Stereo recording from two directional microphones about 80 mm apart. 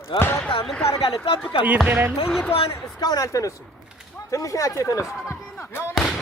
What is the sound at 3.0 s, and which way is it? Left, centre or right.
Speech, left.